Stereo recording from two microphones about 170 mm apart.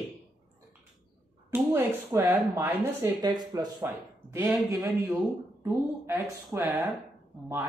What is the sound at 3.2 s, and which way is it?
Speech, 25° right (ahead or behind).